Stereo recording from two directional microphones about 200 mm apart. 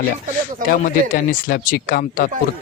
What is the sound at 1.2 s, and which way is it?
Speech, 40° left (ahead or behind).